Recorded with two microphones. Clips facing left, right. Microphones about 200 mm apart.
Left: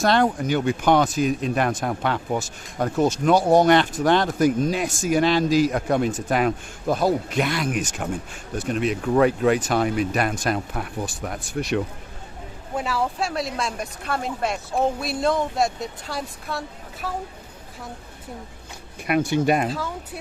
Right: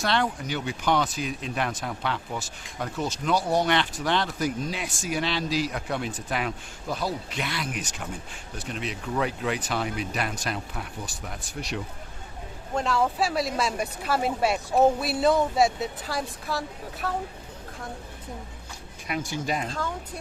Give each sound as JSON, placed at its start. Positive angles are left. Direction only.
{"t": 0.0, "sound": "speech", "side_deg": 45}
{"t": 12.7, "sound": "speech", "side_deg": 5}
{"t": 19.0, "sound": "speech", "side_deg": 60}
{"t": 19.6, "sound": "speech", "side_deg": 5}